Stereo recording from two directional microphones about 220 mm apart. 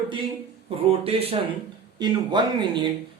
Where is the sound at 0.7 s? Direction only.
25° right (ahead or behind).